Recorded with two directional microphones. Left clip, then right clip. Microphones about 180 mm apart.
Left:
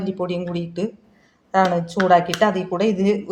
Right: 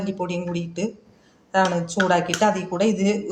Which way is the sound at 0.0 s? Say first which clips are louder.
Left 2 dB; 50° left (ahead or behind).